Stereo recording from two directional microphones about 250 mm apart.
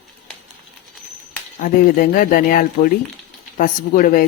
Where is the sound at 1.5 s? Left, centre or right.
Left.